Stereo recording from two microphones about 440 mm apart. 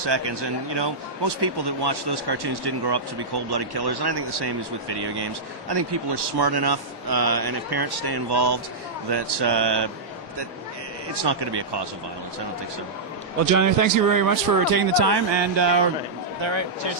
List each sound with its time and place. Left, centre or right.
0.0 s speech: right
11.1 s speech: right
13.4 s a man's voice: right
14.8 s speech: right
16.4 s speech: right